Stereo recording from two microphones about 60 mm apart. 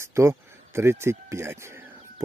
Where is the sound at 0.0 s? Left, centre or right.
Right.